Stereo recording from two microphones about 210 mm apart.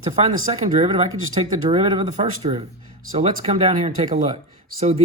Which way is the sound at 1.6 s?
30° right (ahead or behind).